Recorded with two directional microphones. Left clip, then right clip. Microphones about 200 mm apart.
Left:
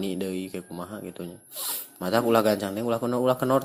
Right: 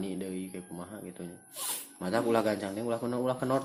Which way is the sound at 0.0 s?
25° left (ahead or behind).